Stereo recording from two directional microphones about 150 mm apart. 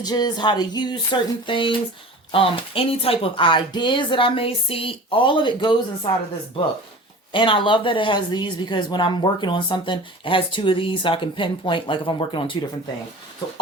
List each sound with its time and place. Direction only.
0.0 s speech: 30° left (ahead or behind)
7.3 s speech: 35° left (ahead or behind)